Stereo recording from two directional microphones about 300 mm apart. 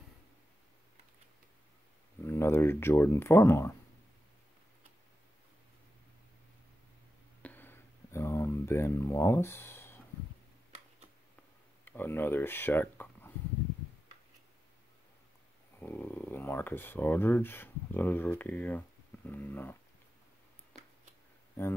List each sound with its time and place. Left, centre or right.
2.2 s speech: centre
7.4 s a sound: centre
11.8 s speech: centre
15.8 s speech: centre
21.6 s speech: centre